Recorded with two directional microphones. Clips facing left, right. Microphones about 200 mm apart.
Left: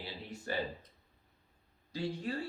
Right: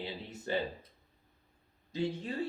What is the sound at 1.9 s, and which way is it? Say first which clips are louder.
Speech: right 2 dB; 20° right (ahead or behind).